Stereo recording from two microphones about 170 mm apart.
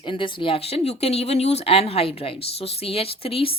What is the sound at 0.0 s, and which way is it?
Speech, 30° left (ahead or behind).